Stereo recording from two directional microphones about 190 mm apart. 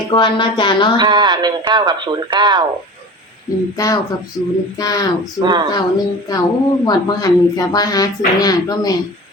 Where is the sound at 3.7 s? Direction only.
20° left (ahead or behind).